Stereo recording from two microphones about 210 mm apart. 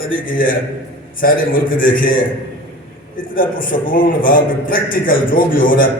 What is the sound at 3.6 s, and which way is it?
A man's voice, 40° left (ahead or behind).